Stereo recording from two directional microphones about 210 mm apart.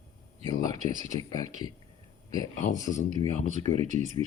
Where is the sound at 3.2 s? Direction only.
30° right (ahead or behind).